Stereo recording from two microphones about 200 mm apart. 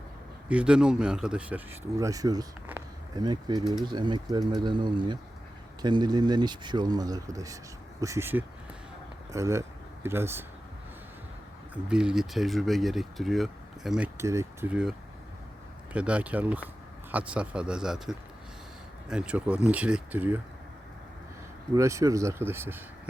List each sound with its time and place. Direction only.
0.4 s speech: 5° right (ahead or behind)
11.7 s speech: 5° right (ahead or behind)
14.2 s speech: 15° right (ahead or behind)
21.8 s speech: 15° right (ahead or behind)